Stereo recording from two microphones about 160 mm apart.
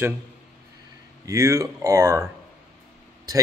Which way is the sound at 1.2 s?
20° right (ahead or behind).